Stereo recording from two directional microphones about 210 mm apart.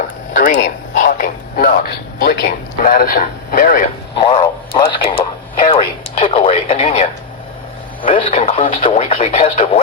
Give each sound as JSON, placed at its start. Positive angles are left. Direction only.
{"t": 0.3, "sound": "speech", "side_deg": 35}
{"t": 4.1, "sound": "a sound", "side_deg": 20}
{"t": 5.1, "sound": "radio", "side_deg": 25}
{"t": 8.0, "sound": "speech", "side_deg": 25}